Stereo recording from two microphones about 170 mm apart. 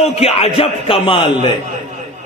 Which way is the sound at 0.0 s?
35° left (ahead or behind).